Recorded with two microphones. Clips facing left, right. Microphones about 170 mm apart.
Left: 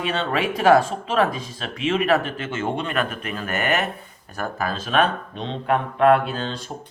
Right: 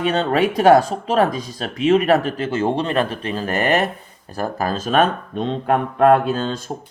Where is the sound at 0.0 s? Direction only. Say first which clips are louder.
Right 6 dB; 40° right (ahead or behind).